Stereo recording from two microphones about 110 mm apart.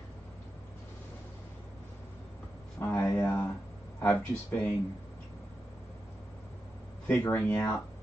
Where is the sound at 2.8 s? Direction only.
20° left (ahead or behind).